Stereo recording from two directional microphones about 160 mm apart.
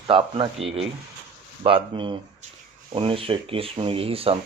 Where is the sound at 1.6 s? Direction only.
30° right (ahead or behind).